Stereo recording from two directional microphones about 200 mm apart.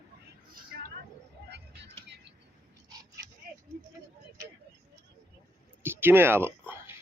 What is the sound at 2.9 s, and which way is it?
Dog, 20° right (ahead or behind).